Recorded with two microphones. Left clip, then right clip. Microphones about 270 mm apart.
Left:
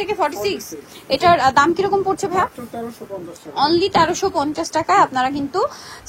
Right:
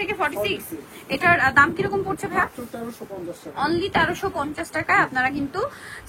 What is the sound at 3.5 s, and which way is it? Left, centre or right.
A woman's voice, centre.